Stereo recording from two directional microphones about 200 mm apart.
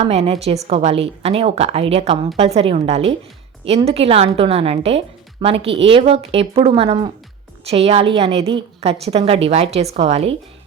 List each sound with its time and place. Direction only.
0.0 s a woman's voice: 30° right (ahead or behind)